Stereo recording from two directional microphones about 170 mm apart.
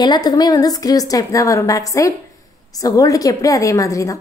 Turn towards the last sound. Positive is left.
turn(degrees=20)  # may be behind; listen again after turning